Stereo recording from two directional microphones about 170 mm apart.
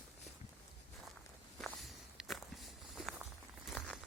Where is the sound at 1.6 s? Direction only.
Centre (ahead or behind).